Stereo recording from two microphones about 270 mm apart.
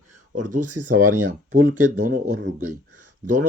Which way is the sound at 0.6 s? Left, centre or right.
Right.